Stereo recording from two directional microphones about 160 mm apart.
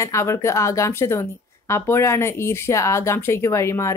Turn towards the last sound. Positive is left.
turn(degrees=15)  # may be behind; listen again after turning